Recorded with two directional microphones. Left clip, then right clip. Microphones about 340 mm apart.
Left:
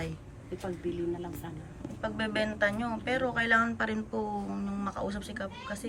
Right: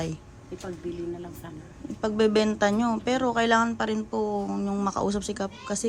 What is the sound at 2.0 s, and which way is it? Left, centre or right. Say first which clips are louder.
A woman's voice: right 9 dB; centre.